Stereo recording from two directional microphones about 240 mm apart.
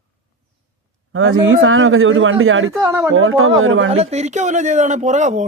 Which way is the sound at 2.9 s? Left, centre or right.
Centre.